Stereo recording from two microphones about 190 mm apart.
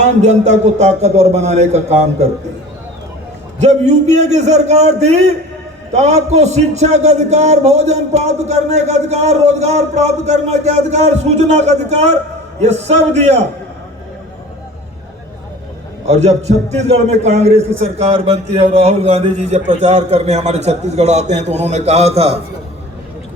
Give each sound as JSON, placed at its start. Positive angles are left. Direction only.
{"t": 0.0, "sound": "a man's voice", "side_deg": -35}
{"t": 3.6, "sound": "a man's voice", "side_deg": -35}
{"t": 16.0, "sound": "a man's voice", "side_deg": -35}